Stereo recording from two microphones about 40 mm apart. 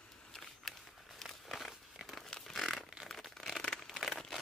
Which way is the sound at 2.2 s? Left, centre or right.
Centre.